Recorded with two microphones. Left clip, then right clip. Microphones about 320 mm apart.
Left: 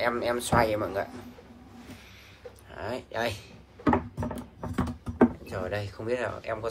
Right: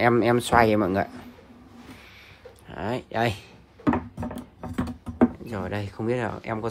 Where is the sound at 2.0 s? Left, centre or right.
Right.